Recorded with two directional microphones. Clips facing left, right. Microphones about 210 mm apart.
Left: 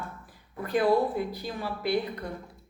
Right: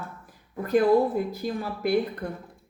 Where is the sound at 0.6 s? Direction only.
45° right (ahead or behind).